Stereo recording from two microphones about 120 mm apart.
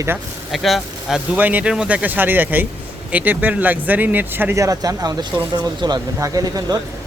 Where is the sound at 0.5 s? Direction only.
Centre (ahead or behind).